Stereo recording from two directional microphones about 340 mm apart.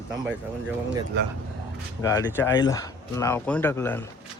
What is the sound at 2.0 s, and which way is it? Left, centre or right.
Speech, centre.